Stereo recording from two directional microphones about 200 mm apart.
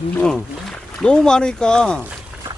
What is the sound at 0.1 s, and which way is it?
Speech, 5° left (ahead or behind).